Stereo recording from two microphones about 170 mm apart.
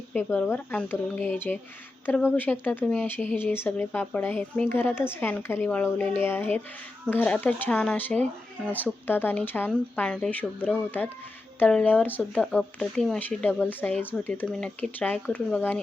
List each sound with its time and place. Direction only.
0.1 s speech: 10° left (ahead or behind)